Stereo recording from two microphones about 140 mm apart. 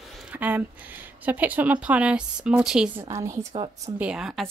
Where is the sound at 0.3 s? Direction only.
10° right (ahead or behind).